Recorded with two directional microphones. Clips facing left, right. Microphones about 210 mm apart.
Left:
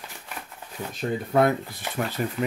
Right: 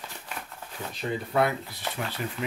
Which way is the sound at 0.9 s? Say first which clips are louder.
Left 4 dB; 50° left (ahead or behind).